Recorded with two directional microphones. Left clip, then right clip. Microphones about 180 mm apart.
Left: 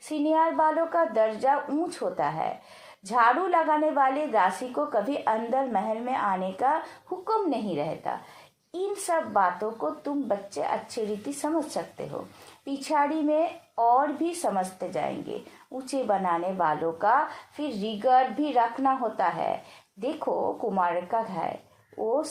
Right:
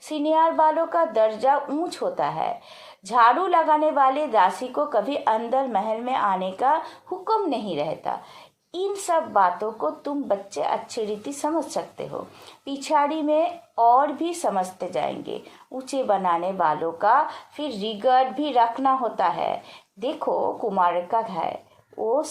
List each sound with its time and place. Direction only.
0.1 s a woman's voice: 25° right (ahead or behind)